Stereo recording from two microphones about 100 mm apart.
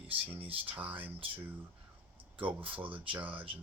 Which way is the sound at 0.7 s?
15° right (ahead or behind).